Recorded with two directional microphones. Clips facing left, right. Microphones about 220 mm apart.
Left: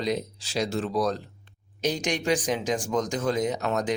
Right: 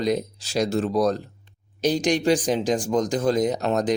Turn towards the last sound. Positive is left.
turn(degrees=-35)  # may be behind; listen again after turning